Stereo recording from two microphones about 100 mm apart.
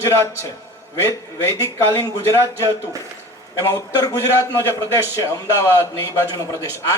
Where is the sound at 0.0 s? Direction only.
30° left (ahead or behind).